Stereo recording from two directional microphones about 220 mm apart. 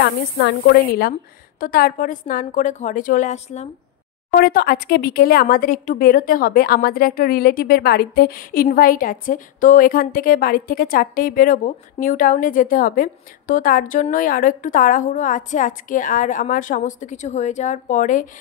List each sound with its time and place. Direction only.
0.0 s a woman's voice: 50° left (ahead or behind)
1.6 s speech: 40° left (ahead or behind)
4.4 s speech: 40° left (ahead or behind)